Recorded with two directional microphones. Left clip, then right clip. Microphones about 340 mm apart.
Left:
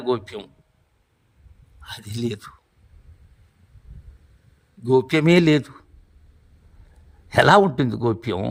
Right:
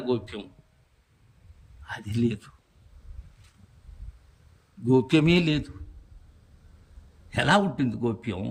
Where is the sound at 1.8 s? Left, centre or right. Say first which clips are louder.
Even; centre.